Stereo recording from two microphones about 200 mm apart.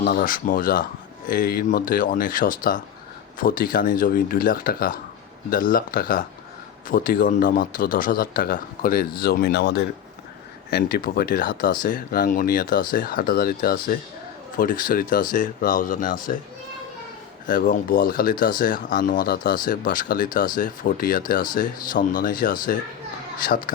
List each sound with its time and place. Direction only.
0.0 s speech: 45° left (ahead or behind)
17.4 s speech: 45° left (ahead or behind)